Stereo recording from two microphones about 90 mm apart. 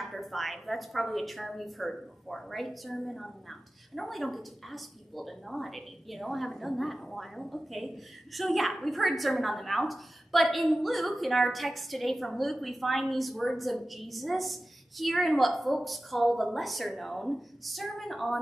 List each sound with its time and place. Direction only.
0.0 s a woman's voice: centre (ahead or behind)